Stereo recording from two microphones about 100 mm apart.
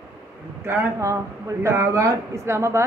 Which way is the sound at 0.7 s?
30° right (ahead or behind).